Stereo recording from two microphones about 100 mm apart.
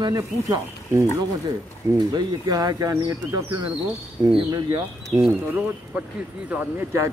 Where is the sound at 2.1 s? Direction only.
45° right (ahead or behind).